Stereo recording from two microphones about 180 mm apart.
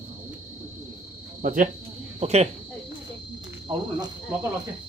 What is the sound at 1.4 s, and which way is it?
Speech, 50° right (ahead or behind).